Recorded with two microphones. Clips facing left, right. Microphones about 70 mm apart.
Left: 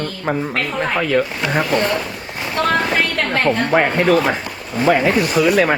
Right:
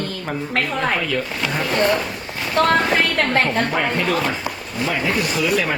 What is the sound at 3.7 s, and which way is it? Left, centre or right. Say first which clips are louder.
Speech: left 6 dB; left.